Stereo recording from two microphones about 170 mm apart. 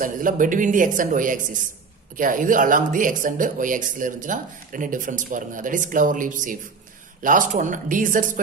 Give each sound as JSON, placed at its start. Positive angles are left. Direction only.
{"t": 0.0, "sound": "speech", "side_deg": -50}